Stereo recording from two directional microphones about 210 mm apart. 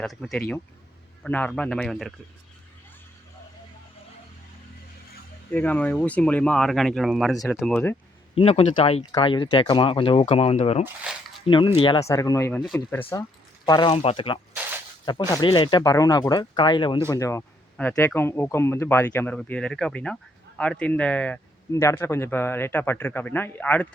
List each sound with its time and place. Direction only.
0.0 s speech: centre (ahead or behind)
5.5 s speech: 5° left (ahead or behind)
8.4 s speech: 30° left (ahead or behind)
10.8 s speech: 5° right (ahead or behind)
11.4 s speech: 25° left (ahead or behind)
12.5 s speech: centre (ahead or behind)
13.7 s speech: 20° left (ahead or behind)
14.5 s a sound: 10° right (ahead or behind)
15.3 s speech: 20° left (ahead or behind)